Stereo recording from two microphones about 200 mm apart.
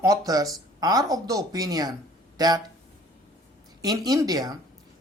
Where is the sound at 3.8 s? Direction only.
20° right (ahead or behind).